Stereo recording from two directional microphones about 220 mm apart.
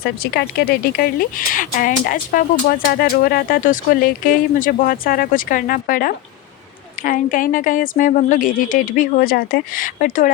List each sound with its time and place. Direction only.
0.2 s speech: 45° left (ahead or behind)